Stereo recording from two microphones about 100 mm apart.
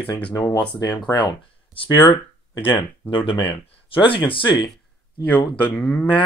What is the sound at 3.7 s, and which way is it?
Speech, 60° left (ahead or behind).